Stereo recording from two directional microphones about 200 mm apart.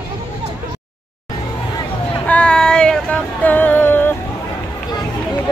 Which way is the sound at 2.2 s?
5° left (ahead or behind).